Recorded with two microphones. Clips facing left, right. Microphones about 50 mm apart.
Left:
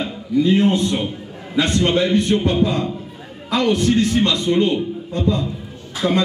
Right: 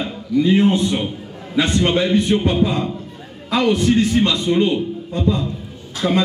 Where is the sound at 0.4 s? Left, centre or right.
Centre.